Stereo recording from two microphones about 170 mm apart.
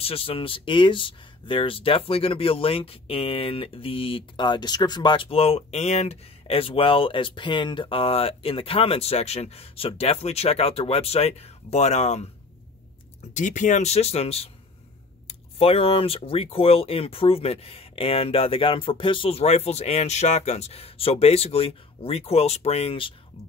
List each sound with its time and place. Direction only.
0.0 s speech: 35° left (ahead or behind)
13.3 s speech: 45° left (ahead or behind)